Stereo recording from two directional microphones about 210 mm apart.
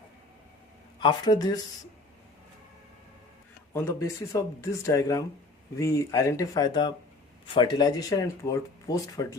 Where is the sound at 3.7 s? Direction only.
10° left (ahead or behind).